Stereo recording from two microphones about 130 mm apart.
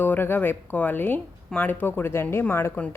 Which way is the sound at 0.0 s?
15° left (ahead or behind).